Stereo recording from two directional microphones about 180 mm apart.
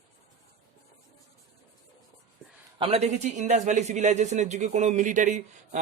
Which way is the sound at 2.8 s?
35° right (ahead or behind).